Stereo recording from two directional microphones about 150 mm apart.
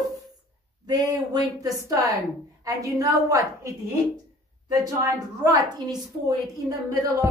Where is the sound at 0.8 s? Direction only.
25° right (ahead or behind).